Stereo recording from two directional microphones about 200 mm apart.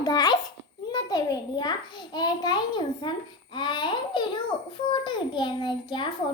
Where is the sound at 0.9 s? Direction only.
20° left (ahead or behind).